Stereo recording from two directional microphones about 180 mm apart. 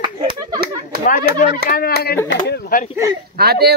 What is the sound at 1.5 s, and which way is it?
Speech, 55° left (ahead or behind).